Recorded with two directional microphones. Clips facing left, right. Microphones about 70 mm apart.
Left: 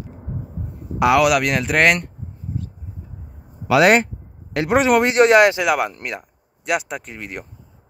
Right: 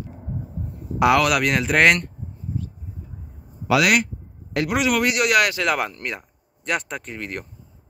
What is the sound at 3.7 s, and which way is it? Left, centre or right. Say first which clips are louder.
Speech: left 5 dB; left.